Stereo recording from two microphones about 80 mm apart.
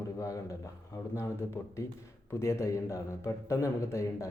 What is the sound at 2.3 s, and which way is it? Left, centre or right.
Speech, left.